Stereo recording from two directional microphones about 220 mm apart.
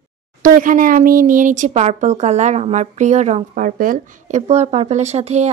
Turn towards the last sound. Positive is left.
turn(degrees=-30)  # may be behind; listen again after turning